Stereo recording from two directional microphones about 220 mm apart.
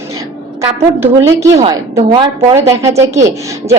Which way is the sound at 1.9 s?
25° right (ahead or behind).